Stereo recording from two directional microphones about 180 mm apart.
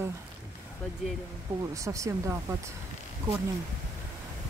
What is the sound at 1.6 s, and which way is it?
Speech, 15° right (ahead or behind).